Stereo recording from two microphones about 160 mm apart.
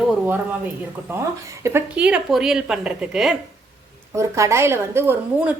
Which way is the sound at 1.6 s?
10° right (ahead or behind).